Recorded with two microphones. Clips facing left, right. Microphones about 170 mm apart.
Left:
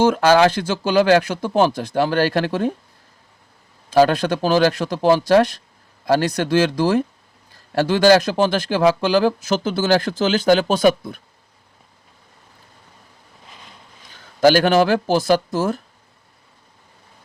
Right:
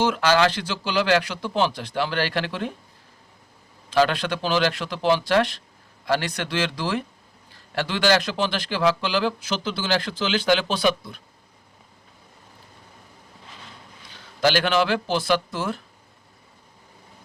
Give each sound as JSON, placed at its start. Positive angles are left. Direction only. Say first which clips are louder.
{"t": 0.0, "sound": "speech", "louder": "left 6 dB", "side_deg": 45}
{"t": 3.8, "sound": "speech", "louder": "left 6 dB", "side_deg": 45}
{"t": 14.1, "sound": "a man's voice", "louder": "left 7 dB", "side_deg": 45}